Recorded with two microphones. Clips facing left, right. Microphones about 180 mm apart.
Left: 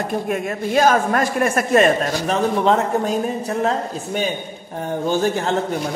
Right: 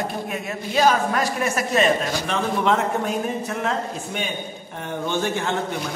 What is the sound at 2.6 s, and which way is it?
A man's voice, 35° left (ahead or behind).